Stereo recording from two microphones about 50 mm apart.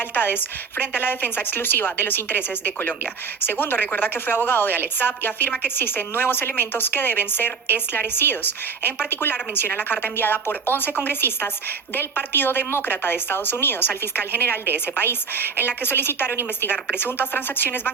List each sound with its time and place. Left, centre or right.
0.1 s a woman's voice: left